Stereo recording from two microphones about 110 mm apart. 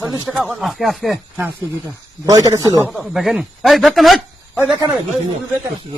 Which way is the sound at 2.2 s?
30° right (ahead or behind).